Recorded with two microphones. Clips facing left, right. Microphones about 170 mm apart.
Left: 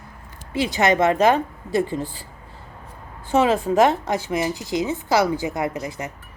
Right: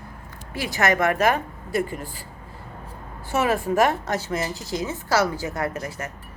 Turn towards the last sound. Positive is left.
turn(degrees=15)  # may be behind; listen again after turning